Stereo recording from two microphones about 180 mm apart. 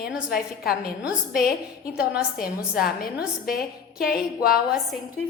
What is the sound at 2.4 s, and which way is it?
A woman's voice, 55° left (ahead or behind).